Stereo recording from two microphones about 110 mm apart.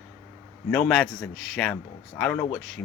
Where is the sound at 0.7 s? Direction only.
5° left (ahead or behind).